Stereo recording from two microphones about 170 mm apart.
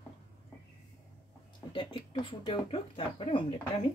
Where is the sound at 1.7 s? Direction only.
30° left (ahead or behind).